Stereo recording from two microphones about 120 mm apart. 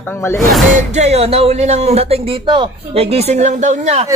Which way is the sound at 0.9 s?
65° right (ahead or behind).